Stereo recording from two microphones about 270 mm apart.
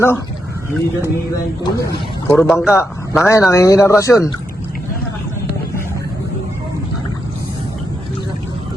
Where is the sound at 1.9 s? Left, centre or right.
Centre.